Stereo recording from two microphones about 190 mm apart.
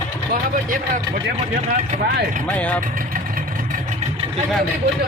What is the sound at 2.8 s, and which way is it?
Vehicle, 45° right (ahead or behind).